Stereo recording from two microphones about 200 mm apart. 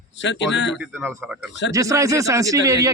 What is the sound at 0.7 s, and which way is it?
Speech, 5° right (ahead or behind).